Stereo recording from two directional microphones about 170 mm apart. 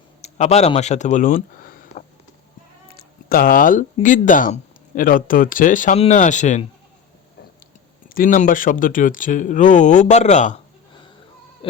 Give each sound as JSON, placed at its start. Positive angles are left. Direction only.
{"t": 0.2, "sound": "speech", "side_deg": 40}
{"t": 2.9, "sound": "a sound", "side_deg": 60}
{"t": 4.0, "sound": "speech", "side_deg": 50}
{"t": 8.1, "sound": "speech", "side_deg": 55}